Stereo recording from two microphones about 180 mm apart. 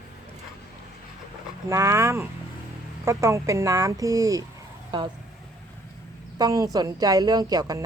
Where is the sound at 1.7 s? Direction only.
15° right (ahead or behind).